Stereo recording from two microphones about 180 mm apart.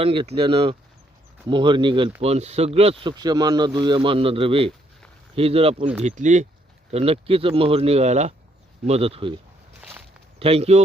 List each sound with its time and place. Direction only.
0.0 s speech: 30° right (ahead or behind)
10.4 s speech: 35° right (ahead or behind)